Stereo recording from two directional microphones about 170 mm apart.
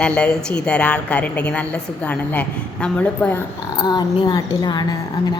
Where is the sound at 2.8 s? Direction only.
10° left (ahead or behind).